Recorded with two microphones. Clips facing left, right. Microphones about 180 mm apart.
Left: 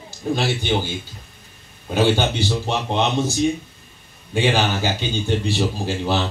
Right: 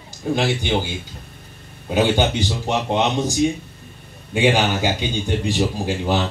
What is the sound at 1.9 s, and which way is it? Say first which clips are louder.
Speech: right 1 dB; 15° right (ahead or behind).